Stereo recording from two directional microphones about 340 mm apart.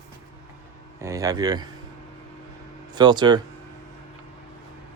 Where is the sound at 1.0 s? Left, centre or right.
Centre.